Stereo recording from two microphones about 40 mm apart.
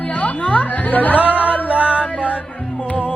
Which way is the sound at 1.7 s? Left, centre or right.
Right.